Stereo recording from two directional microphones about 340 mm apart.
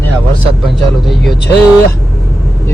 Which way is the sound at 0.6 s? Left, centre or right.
Centre.